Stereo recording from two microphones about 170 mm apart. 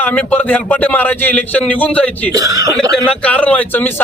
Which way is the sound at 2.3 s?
20° right (ahead or behind).